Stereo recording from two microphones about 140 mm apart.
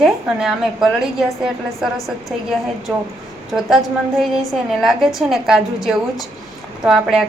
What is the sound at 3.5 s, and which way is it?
A woman's voice, centre (ahead or behind).